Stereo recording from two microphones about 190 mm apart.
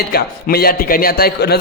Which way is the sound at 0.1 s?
55° left (ahead or behind).